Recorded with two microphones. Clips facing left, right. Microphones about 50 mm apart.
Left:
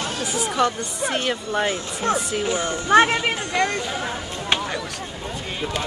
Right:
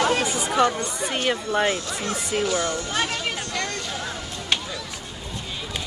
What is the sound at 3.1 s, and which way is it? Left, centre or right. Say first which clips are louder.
Music: left 5 dB; left.